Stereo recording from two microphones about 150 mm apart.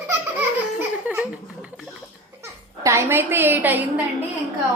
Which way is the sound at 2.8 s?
15° right (ahead or behind).